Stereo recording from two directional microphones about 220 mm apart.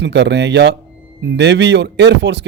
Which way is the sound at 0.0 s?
50° right (ahead or behind).